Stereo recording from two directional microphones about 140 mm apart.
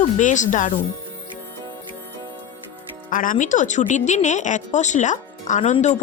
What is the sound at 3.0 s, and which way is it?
Speech, 75° left (ahead or behind).